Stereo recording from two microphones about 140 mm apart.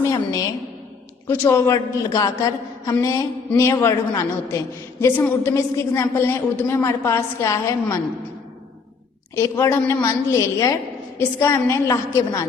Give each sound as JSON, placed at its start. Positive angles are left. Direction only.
{"t": 0.0, "sound": "a woman's voice", "side_deg": 25}
{"t": 9.3, "sound": "a woman's voice", "side_deg": 20}